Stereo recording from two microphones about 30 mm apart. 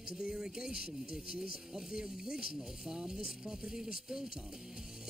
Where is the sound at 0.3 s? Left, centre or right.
Right.